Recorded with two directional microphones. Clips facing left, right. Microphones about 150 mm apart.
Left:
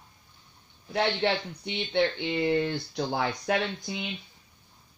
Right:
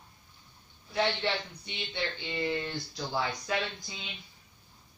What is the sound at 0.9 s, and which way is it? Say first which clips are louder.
Speech: left 4 dB; 60° left (ahead or behind).